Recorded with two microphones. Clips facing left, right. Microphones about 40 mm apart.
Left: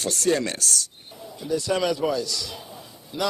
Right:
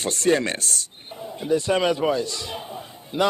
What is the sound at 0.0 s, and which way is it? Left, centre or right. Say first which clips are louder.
A man's voice: right 2 dB; right.